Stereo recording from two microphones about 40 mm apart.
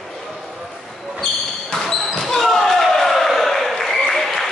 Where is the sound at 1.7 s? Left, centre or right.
Centre.